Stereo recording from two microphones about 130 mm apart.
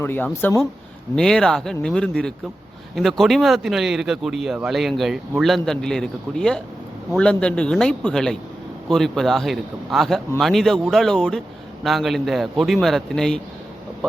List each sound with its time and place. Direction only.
0.0 s a man's voice: 15° left (ahead or behind)
1.1 s a man's voice: 5° left (ahead or behind)